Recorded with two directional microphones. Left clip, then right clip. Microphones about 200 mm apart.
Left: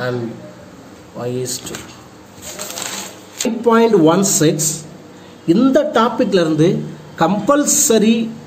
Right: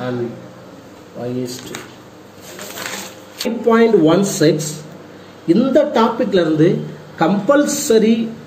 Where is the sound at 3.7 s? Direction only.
50° left (ahead or behind).